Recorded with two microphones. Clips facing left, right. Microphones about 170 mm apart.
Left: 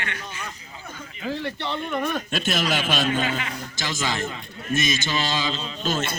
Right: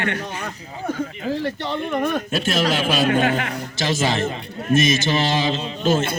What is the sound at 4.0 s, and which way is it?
Mantra, 25° right (ahead or behind).